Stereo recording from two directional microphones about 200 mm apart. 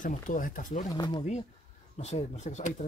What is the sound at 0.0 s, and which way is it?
Speech, 40° left (ahead or behind).